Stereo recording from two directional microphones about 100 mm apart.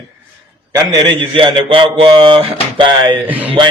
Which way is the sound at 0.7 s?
40° right (ahead or behind).